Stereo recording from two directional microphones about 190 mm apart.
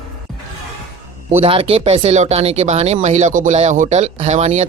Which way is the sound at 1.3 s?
30° right (ahead or behind).